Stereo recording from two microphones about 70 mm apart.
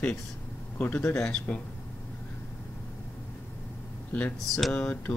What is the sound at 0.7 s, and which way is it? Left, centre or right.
Speech, left.